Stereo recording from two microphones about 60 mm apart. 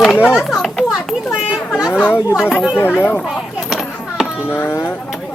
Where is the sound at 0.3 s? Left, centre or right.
Centre.